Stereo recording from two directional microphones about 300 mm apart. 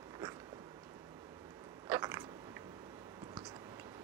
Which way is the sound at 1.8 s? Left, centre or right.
Centre.